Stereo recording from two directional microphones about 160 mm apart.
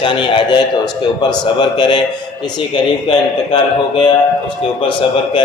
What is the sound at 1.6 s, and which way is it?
Speech, 30° left (ahead or behind).